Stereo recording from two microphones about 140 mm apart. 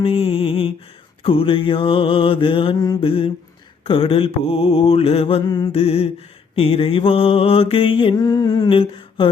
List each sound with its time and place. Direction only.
0.0 s mantra: 40° left (ahead or behind)
3.1 s mantra: 40° left (ahead or behind)
5.5 s mantra: 30° left (ahead or behind)
5.7 s mantra: 45° left (ahead or behind); by 8.8 s 30° left (ahead or behind)
8.8 s a sound: 40° left (ahead or behind)